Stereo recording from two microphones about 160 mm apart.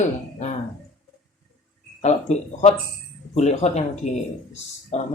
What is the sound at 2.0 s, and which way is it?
Speech, 45° left (ahead or behind).